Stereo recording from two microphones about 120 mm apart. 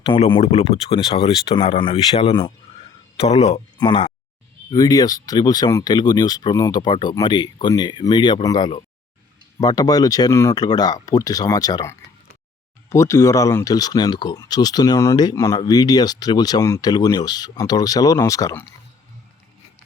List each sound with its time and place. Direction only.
0.1 s speech: 45° left (ahead or behind)
0.4 s speech: 65° left (ahead or behind)
3.2 s speech: 60° left (ahead or behind)
3.8 s speech: 40° left (ahead or behind)